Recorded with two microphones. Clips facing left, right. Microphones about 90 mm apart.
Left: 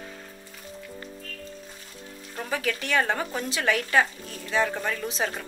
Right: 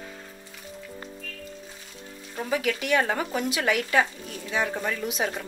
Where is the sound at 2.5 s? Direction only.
35° left (ahead or behind).